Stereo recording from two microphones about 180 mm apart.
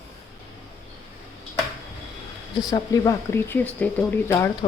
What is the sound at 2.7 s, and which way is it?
Speech, 20° left (ahead or behind).